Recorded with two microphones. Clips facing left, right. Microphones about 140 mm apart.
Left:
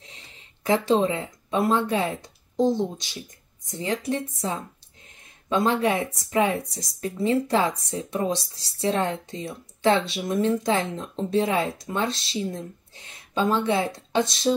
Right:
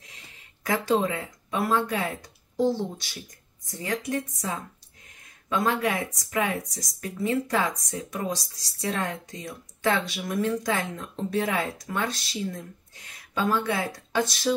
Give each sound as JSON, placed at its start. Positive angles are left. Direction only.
{"t": 0.0, "sound": "speech", "side_deg": 25}